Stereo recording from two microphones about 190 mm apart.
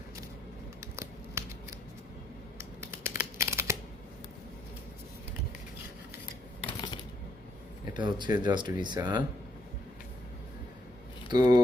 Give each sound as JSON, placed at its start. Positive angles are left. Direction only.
{"t": 0.8, "sound": "scissors", "side_deg": -15}
{"t": 2.6, "sound": "computer keyboard", "side_deg": -10}
{"t": 3.3, "sound": "a sound", "side_deg": -15}
{"t": 6.7, "sound": "shuffling cards", "side_deg": 25}
{"t": 7.9, "sound": "speech", "side_deg": -25}
{"t": 11.3, "sound": "speech", "side_deg": -20}